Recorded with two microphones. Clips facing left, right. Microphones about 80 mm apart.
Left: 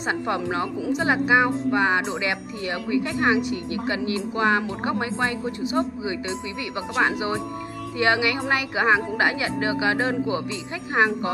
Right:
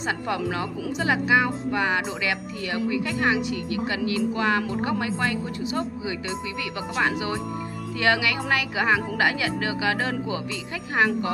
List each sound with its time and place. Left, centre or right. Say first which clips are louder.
0.3 s speech: left 2 dB; left
7.0 s speech: left 2 dB; left